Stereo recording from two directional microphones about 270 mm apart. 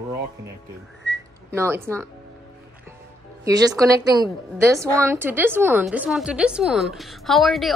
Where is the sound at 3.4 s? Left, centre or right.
Centre.